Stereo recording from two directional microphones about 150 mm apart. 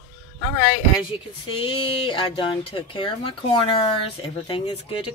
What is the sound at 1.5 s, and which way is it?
Speech, 35° left (ahead or behind).